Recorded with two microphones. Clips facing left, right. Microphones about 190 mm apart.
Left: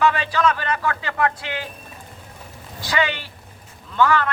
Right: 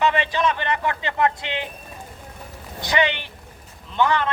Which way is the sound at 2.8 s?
20° right (ahead or behind).